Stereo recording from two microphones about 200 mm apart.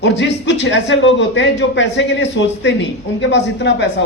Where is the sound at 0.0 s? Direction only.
65° left (ahead or behind).